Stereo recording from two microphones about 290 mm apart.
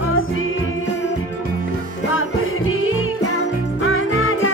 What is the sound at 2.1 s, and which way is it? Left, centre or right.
Music, left.